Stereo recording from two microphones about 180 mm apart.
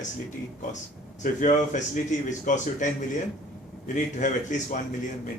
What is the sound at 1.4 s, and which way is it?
A man's voice, 45° left (ahead or behind).